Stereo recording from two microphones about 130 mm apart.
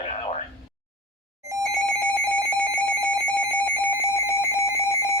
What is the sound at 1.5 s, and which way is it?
Telephone bell ringing, 25° right (ahead or behind).